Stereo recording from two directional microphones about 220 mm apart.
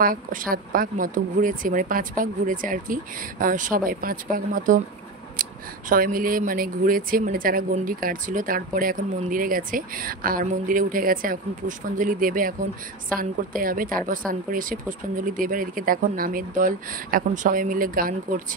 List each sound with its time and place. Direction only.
0.0 s speech: 40° right (ahead or behind)